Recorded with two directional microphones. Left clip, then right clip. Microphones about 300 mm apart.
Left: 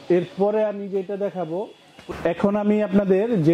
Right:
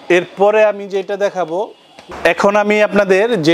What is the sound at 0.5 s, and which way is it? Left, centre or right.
A man's voice, centre.